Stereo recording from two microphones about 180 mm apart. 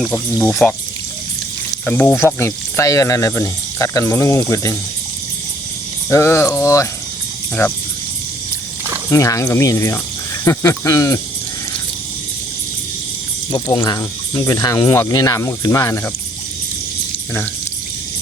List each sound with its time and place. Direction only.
0.0 s speech: 5° left (ahead or behind)
1.8 s speech: 5° left (ahead or behind)
6.1 s speech: 15° left (ahead or behind)
9.0 s speech: 15° left (ahead or behind)
13.5 s speech: 20° left (ahead or behind)